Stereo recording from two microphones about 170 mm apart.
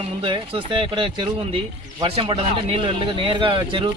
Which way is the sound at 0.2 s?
30° right (ahead or behind).